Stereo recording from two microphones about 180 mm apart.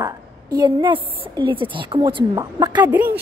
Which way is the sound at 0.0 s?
20° right (ahead or behind).